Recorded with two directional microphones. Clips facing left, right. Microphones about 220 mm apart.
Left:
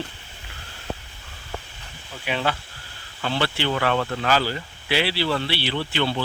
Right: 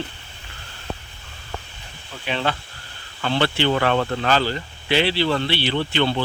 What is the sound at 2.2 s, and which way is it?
Speech, 10° left (ahead or behind).